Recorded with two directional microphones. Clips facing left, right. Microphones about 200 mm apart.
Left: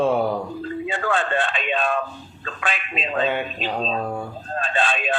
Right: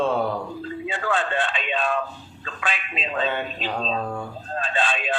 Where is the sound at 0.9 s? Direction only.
50° left (ahead or behind).